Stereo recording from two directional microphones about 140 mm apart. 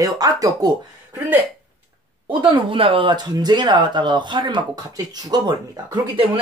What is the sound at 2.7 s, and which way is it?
Speech, 40° right (ahead or behind).